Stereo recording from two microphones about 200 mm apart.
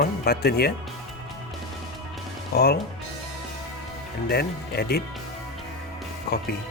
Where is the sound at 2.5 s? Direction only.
50° left (ahead or behind).